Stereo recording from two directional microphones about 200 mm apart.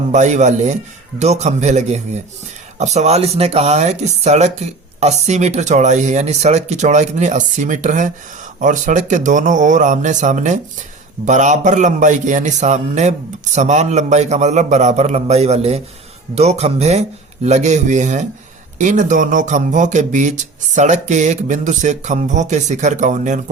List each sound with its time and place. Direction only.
0.1 s speech: 35° right (ahead or behind)